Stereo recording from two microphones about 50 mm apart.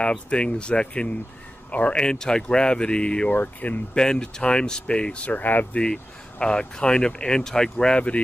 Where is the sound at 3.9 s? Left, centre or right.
Centre.